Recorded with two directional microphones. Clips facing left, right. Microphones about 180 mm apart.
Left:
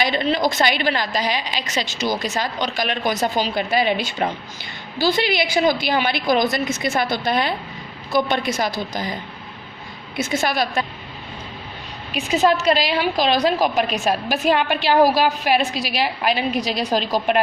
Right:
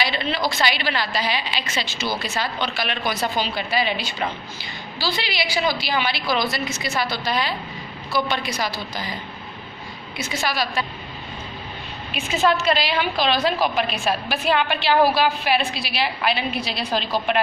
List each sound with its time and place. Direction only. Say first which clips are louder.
0.0 s a woman's voice: left 4 dB; 45° left (ahead or behind)
10.2 s a woman's voice: left 4 dB; 50° left (ahead or behind)
12.1 s a woman's voice: left 3 dB; 40° left (ahead or behind)